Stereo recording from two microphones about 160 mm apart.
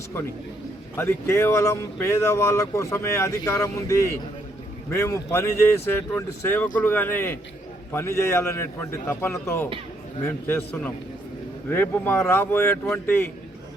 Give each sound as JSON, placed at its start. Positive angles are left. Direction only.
{"t": 0.9, "sound": "speech", "side_deg": 15}